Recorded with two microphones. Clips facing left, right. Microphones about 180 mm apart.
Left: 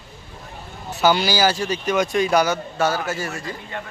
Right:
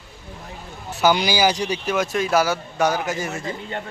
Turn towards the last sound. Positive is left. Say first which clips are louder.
# right 2 dB
turn(degrees=-25)  # may be behind; listen again after turning